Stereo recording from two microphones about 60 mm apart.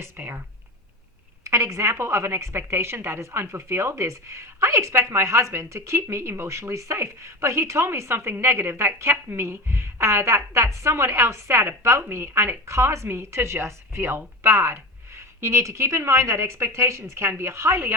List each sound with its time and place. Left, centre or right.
0.0 s speech: right
1.5 s a woman's voice: right